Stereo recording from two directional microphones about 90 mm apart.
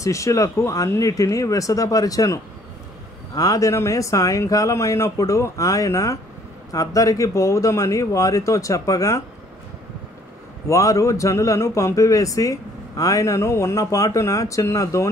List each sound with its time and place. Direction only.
0.0 s a man's voice: 35° left (ahead or behind)
10.7 s a man's voice: 35° left (ahead or behind)